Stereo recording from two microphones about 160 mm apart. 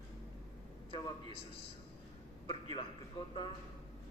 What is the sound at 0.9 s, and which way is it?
Speech, 30° left (ahead or behind).